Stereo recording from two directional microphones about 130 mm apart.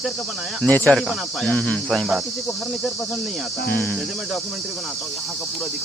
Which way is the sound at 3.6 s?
15° left (ahead or behind).